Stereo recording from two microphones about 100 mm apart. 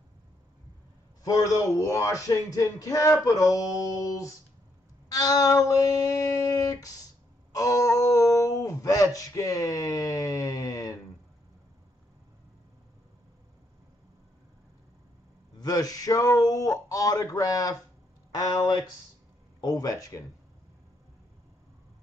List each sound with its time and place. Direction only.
1.2 s speech: 35° left (ahead or behind)
15.6 s speech: 40° left (ahead or behind)